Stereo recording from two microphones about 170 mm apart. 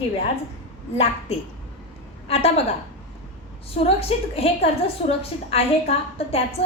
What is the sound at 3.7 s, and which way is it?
A woman's voice, 35° left (ahead or behind).